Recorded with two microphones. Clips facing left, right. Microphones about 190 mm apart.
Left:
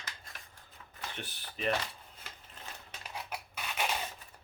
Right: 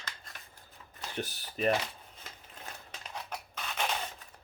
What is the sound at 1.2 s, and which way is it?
Speech, 40° right (ahead or behind).